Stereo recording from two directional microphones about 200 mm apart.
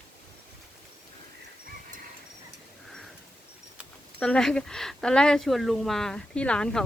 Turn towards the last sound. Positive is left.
turn(degrees=5)  # may be behind; listen again after turning